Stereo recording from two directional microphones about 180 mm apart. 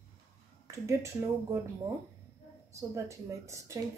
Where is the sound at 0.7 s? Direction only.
15° right (ahead or behind).